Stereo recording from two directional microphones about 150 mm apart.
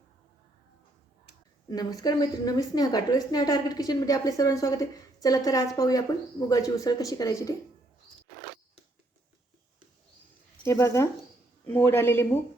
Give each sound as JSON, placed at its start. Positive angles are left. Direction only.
{"t": 1.7, "sound": "a woman's voice", "side_deg": 25}
{"t": 10.6, "sound": "speech", "side_deg": 20}